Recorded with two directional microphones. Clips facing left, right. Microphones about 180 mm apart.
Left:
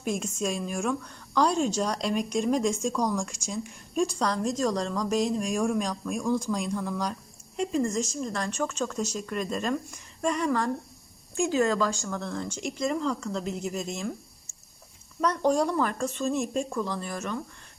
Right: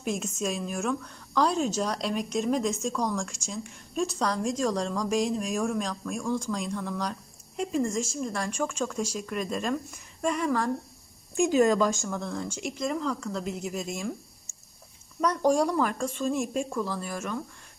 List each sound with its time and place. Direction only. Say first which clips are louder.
0.0 s a woman's voice: left 1 dB; 5° right (ahead or behind)
11.3 s speech: right 3 dB; 15° right (ahead or behind)
12.0 s a woman's voice: even; 5° right (ahead or behind)
15.2 s a woman's voice: right 1 dB; 10° right (ahead or behind)